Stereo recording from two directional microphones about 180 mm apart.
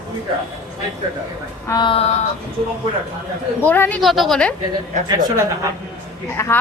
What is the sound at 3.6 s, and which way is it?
Speech, 10° left (ahead or behind).